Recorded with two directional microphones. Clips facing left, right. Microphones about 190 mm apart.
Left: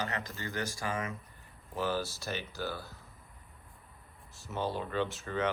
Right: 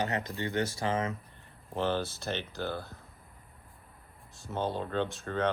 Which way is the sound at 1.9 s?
Centre (ahead or behind).